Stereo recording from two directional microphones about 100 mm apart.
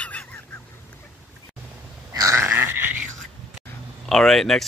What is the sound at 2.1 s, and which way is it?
Burping, 30° right (ahead or behind).